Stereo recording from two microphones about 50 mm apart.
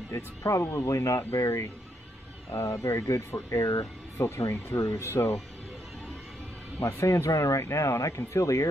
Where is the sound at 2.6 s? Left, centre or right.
Left.